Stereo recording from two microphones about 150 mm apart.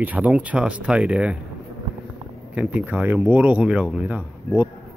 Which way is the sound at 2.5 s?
5° right (ahead or behind).